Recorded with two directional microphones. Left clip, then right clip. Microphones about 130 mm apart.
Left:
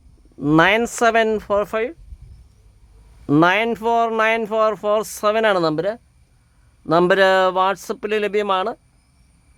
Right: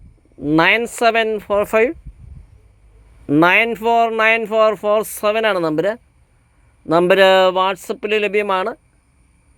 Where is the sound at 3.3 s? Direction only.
5° right (ahead or behind).